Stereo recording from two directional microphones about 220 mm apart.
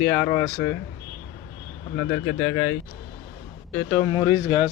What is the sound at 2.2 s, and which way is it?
Speech, 50° left (ahead or behind).